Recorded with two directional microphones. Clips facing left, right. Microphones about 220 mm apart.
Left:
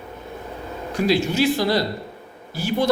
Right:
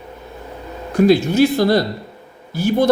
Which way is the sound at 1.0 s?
55° right (ahead or behind).